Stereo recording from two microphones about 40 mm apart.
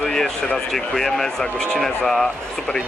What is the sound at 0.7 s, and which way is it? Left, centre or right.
Speech, centre.